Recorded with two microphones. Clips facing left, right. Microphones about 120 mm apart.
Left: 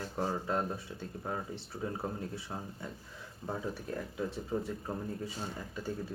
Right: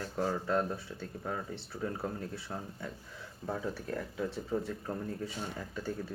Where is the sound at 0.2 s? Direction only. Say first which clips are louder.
Right 2 dB; 20° left (ahead or behind).